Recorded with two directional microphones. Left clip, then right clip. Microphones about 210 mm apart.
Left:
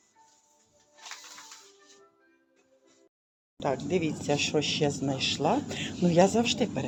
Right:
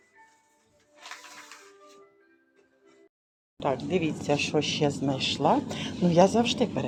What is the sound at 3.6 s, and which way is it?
Speech, centre (ahead or behind).